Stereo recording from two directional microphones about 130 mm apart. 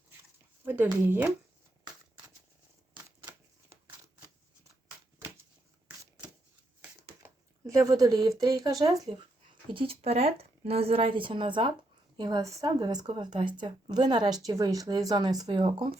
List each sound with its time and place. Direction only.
0.6 s speech: 15° right (ahead or behind)
7.7 s speech: 25° right (ahead or behind)
9.7 s speech: 50° right (ahead or behind)